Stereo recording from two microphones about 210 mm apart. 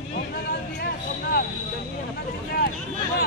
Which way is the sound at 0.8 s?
45° left (ahead or behind).